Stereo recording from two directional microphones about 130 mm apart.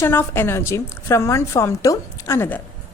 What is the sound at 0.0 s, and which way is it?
A woman's voice, 15° left (ahead or behind).